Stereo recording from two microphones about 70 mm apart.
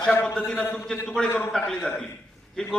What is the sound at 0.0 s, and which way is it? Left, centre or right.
Speech, centre.